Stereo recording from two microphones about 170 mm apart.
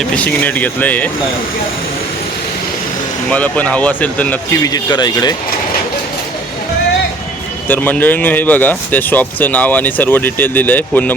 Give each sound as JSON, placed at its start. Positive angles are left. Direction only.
{"t": 0.0, "sound": "speech", "side_deg": 10}
{"t": 3.2, "sound": "speech", "side_deg": 10}
{"t": 4.6, "sound": "speech", "side_deg": 25}
{"t": 7.7, "sound": "speech", "side_deg": 10}